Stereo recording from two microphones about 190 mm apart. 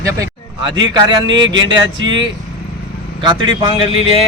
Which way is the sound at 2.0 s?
80° right.